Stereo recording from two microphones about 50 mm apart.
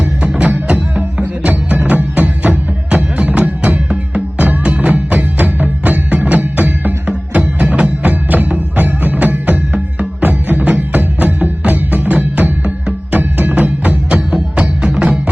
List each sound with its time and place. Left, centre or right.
0.0 s music: right
8.0 s music: right